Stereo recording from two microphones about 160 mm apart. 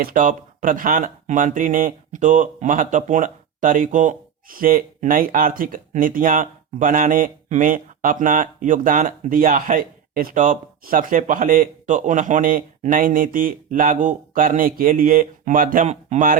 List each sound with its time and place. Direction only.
0.0 s speech: 60° right (ahead or behind)